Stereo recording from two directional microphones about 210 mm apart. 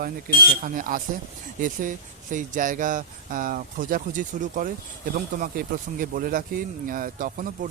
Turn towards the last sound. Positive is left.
turn(degrees=-40)  # may be behind; listen again after turning